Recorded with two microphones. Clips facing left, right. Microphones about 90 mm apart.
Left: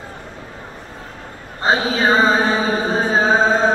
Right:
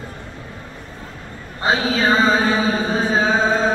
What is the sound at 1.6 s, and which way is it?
Mantra, 25° left (ahead or behind).